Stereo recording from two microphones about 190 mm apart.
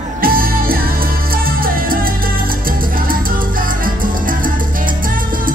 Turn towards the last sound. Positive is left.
turn(degrees=-45)  # may be behind; listen again after turning